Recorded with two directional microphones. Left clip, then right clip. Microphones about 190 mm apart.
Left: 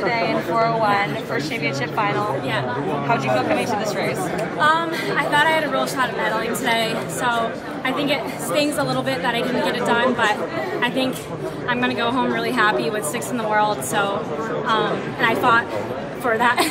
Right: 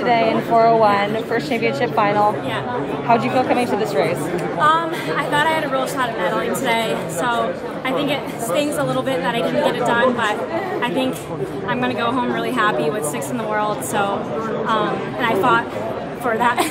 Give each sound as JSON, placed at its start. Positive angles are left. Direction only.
{"t": 0.0, "sound": "speech", "side_deg": -50}
{"t": 4.6, "sound": "a woman's voice", "side_deg": -15}
{"t": 11.7, "sound": "a woman's voice", "side_deg": -10}